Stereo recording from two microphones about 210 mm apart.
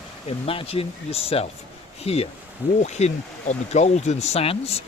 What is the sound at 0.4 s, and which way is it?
Speech, 25° left (ahead or behind).